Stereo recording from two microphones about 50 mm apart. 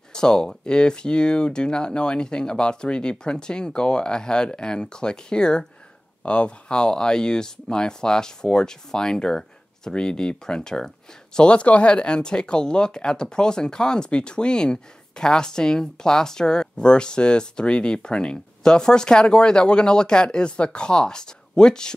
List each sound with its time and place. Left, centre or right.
0.1 s speech: centre